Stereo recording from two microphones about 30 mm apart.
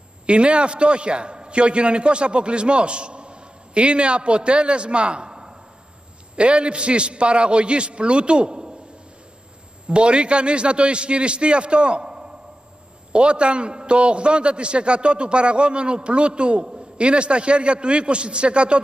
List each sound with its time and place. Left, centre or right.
0.3 s a man's voice: right
6.3 s a man's voice: right
9.8 s a man's voice: right